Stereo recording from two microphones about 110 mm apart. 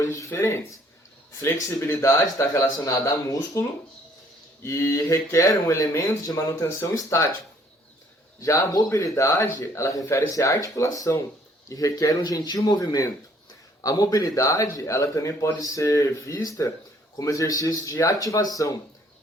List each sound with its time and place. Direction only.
0.0 s speech: 25° left (ahead or behind)
8.4 s speech: 30° left (ahead or behind)